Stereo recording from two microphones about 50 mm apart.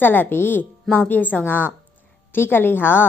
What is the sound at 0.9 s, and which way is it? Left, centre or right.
A woman's voice, left.